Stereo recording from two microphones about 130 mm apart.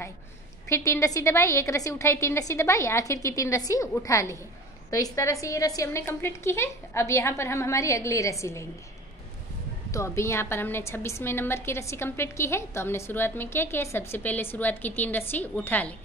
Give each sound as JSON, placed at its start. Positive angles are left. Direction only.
{"t": 0.7, "sound": "a woman's voice", "side_deg": 20}
{"t": 9.8, "sound": "a woman's voice", "side_deg": 20}